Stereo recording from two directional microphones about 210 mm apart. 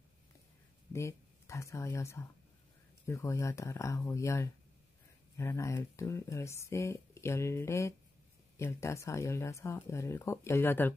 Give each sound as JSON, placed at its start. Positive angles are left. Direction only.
{"t": 0.9, "sound": "speech", "side_deg": 15}